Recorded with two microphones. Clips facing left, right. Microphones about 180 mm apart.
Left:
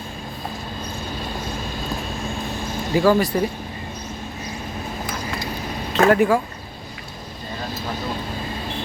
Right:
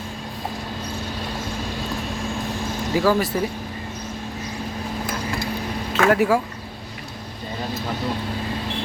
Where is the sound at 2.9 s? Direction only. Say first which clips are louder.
Left 3 dB; centre (ahead or behind).